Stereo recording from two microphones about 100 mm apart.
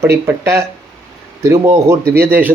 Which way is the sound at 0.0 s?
25° right (ahead or behind).